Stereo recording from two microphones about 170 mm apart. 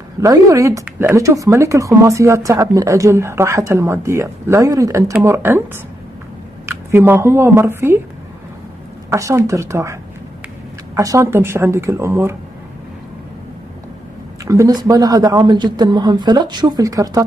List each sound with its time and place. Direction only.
0.2 s speech: 20° right (ahead or behind)
6.7 s speech: 15° right (ahead or behind)
9.1 s speech: 15° right (ahead or behind)
11.0 s speech: 20° right (ahead or behind)
14.4 s speech: 20° right (ahead or behind)